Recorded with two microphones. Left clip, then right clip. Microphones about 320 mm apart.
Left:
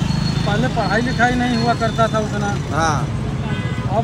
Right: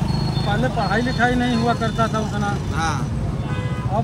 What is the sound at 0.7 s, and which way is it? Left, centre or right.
Speech, centre.